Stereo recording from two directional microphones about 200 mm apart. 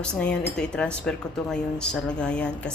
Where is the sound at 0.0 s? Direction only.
5° left (ahead or behind).